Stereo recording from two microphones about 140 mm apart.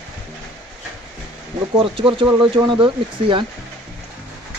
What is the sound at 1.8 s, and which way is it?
Speech, 40° right (ahead or behind).